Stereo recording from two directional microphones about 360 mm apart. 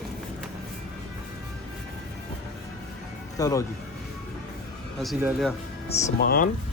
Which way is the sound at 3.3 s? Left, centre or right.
Centre.